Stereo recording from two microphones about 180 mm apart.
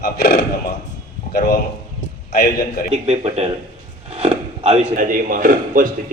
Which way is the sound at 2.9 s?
35° right (ahead or behind).